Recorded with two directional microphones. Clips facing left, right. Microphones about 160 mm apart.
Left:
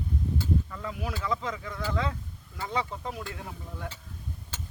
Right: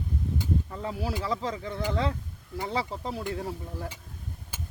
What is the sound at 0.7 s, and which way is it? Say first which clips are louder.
Speech: right 3 dB; 30° right (ahead or behind).